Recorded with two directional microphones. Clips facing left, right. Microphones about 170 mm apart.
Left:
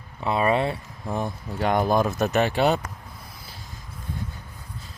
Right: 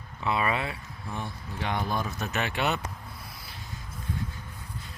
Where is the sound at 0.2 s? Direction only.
30° left (ahead or behind).